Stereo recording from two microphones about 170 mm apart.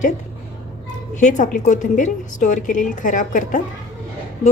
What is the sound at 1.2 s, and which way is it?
A woman's voice, 45° left (ahead or behind).